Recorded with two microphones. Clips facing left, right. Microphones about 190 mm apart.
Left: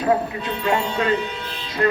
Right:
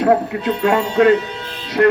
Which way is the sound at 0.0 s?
70° right (ahead or behind).